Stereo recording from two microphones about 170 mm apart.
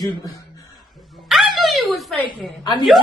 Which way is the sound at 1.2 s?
Centre (ahead or behind).